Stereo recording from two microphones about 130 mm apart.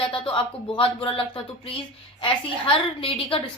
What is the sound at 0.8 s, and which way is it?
A woman's voice, 45° left (ahead or behind).